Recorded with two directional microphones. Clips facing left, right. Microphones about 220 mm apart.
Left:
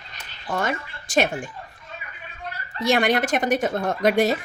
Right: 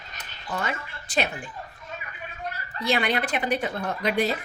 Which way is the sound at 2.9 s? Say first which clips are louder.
Left 5 dB; 45° left (ahead or behind).